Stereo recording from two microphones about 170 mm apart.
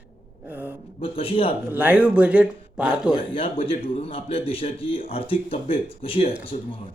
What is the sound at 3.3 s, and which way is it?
A man's voice, 30° left (ahead or behind).